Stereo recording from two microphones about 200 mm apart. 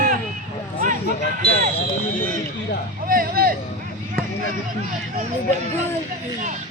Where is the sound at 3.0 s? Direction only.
45° right (ahead or behind).